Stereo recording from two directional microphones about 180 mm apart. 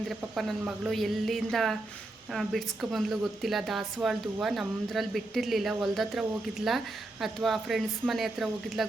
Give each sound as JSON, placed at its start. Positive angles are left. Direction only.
{"t": 0.1, "sound": "speech", "side_deg": 0}